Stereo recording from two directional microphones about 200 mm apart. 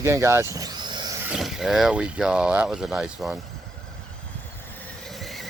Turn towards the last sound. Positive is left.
turn(degrees=0)  # may be behind; listen again after turning